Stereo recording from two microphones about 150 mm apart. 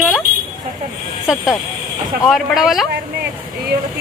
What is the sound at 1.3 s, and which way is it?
A woman's voice, 5° right (ahead or behind).